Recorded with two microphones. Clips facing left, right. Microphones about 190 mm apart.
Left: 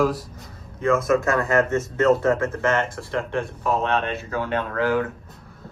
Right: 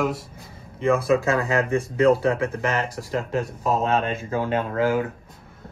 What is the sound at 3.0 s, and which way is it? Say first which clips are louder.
Speech: even; 40° right (ahead or behind).